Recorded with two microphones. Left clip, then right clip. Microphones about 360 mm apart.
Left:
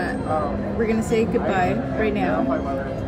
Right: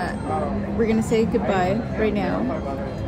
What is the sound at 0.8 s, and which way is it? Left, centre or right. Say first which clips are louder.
Speech: even; centre.